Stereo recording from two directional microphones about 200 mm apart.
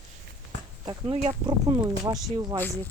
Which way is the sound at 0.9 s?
20° right (ahead or behind).